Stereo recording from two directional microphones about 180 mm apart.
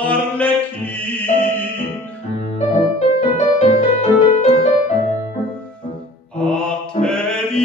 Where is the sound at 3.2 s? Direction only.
40° left (ahead or behind).